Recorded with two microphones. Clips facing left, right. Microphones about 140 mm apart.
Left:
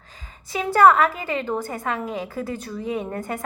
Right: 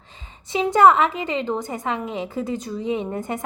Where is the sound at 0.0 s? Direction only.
25° right (ahead or behind).